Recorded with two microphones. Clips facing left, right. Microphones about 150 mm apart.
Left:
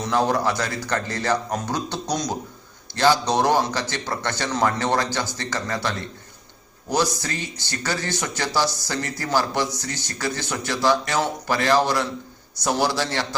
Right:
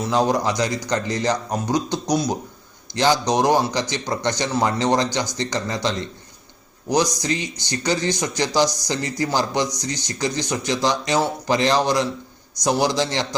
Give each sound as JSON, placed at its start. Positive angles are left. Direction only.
{"t": 0.0, "sound": "speech", "side_deg": -15}